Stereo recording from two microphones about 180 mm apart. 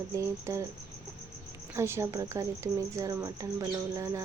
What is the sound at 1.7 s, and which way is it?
Speech, 15° right (ahead or behind).